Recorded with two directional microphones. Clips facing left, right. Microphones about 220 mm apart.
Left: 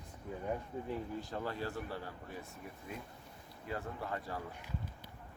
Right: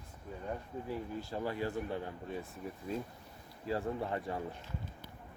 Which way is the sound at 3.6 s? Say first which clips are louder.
Right 6 dB; 25° right (ahead or behind).